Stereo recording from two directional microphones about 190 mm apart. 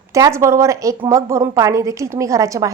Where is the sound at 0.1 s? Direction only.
15° right (ahead or behind).